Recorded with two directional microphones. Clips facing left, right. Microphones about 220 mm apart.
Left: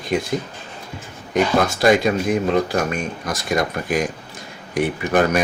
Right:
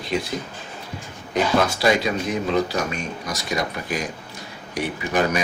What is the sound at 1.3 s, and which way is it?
Speech, 50° left (ahead or behind).